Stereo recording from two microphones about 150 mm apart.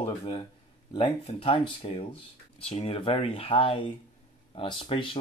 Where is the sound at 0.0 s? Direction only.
35° left (ahead or behind).